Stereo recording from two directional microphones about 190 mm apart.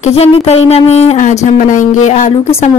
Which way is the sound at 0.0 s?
35° left (ahead or behind).